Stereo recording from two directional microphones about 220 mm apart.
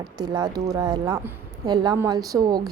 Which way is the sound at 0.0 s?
20° right (ahead or behind).